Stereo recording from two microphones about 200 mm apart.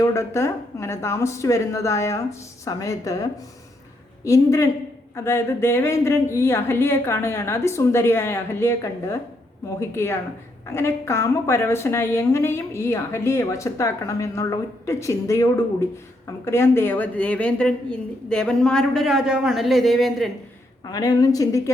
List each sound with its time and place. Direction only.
0.0 s a woman's voice: 15° left (ahead or behind)
20.9 s a woman's voice: 20° left (ahead or behind)